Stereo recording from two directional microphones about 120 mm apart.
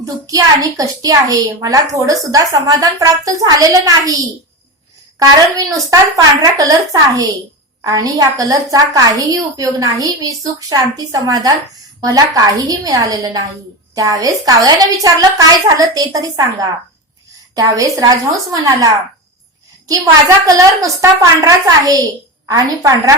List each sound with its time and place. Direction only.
0.0 s a woman's voice: 30° right (ahead or behind)
5.5 s a woman's voice: 30° right (ahead or behind)